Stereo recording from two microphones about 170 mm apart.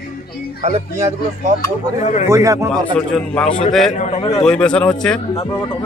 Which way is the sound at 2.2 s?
20° right (ahead or behind).